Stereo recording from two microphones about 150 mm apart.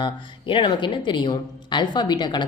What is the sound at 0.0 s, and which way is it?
A woman's voice, 35° left (ahead or behind).